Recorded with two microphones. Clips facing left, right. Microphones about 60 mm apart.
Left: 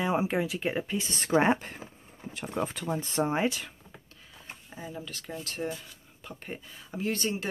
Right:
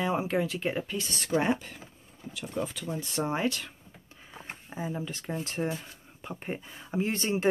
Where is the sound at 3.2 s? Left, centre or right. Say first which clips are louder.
Left 1 dB; centre.